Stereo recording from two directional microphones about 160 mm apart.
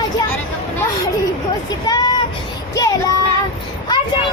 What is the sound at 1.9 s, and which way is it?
Vehicle, 25° left (ahead or behind).